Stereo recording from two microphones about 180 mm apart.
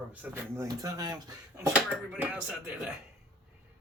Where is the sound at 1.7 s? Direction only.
10° right (ahead or behind).